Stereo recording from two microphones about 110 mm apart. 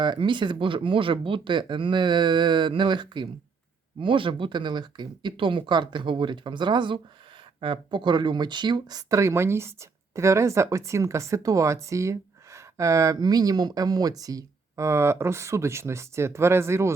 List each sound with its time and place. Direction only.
0.0 s speech: 45° right (ahead or behind); by 16.9 s 25° right (ahead or behind)